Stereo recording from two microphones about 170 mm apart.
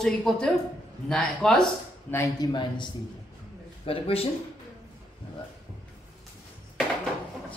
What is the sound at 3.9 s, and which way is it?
Speech, 35° left (ahead or behind).